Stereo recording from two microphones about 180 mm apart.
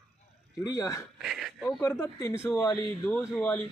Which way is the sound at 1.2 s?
Centre (ahead or behind).